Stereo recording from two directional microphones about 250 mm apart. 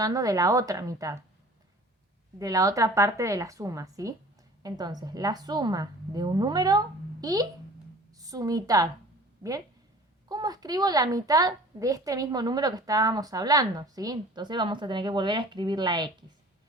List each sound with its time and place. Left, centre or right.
0.0 s a woman's voice: centre
2.4 s a woman's voice: centre
10.2 s a woman's voice: centre